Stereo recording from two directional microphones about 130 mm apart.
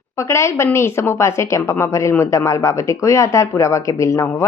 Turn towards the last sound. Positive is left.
turn(degrees=25)  # may be behind; listen again after turning